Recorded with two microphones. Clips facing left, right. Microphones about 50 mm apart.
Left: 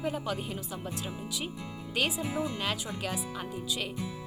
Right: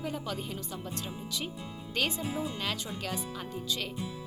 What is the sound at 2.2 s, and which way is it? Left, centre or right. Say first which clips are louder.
Speech: left 2 dB; left.